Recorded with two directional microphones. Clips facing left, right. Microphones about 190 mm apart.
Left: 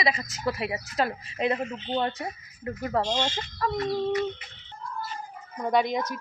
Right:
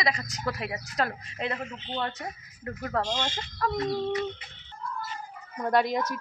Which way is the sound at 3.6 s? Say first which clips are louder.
Left 1 dB; centre (ahead or behind).